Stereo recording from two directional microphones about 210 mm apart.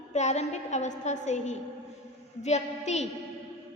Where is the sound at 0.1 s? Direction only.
35° left (ahead or behind).